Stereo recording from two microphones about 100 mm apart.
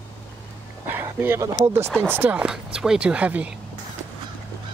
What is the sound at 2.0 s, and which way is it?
Speech, 20° right (ahead or behind).